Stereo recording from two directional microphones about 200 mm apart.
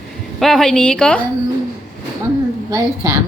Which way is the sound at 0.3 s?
Centre (ahead or behind).